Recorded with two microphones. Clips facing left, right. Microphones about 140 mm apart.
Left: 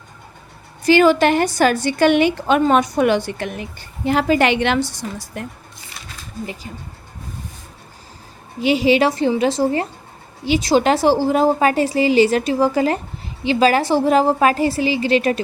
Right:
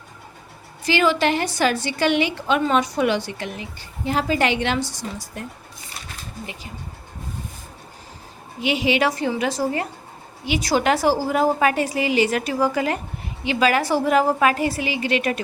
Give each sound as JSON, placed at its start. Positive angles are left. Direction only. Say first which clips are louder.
{"t": 0.9, "sound": "a woman's voice", "louder": "left 6 dB", "side_deg": 45}
{"t": 8.6, "sound": "a woman's voice", "louder": "left 5 dB", "side_deg": 35}